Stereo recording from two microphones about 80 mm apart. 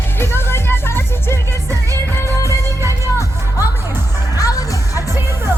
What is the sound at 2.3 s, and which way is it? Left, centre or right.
Music, left.